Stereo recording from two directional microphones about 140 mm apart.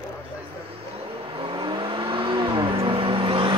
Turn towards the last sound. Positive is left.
turn(degrees=-40)  # may be behind; listen again after turning